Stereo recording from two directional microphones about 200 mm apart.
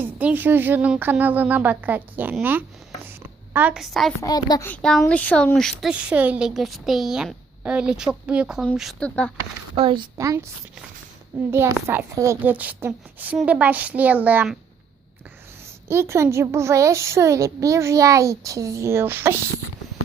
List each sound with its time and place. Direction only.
0.0 s speech: 10° right (ahead or behind)
4.2 s a child's voice: 20° left (ahead or behind)
4.7 s speech: 5° left (ahead or behind)
9.7 s a woman's voice: 25° right (ahead or behind)
11.5 s a child's voice: 10° right (ahead or behind)
15.9 s a child's voice: 15° right (ahead or behind)